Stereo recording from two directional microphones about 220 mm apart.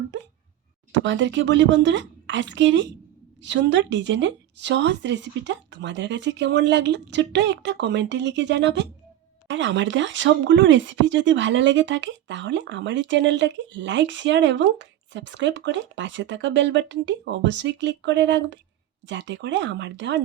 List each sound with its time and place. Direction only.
0.9 s speech: 55° right (ahead or behind)